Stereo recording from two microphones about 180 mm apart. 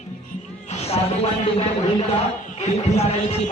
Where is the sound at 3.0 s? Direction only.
35° left (ahead or behind).